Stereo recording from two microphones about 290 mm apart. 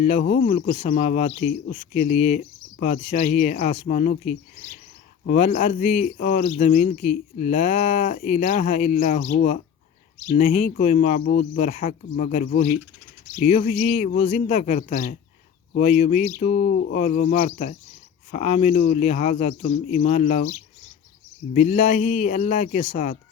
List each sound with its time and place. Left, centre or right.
0.0 s a man's voice: left
16.6 s a man's voice: left
21.5 s a man's voice: left